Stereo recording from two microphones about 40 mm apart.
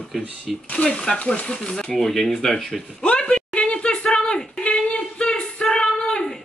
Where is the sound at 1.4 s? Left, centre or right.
Left.